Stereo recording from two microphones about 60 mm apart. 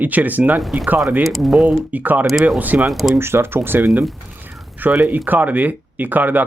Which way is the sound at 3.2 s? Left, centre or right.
Right.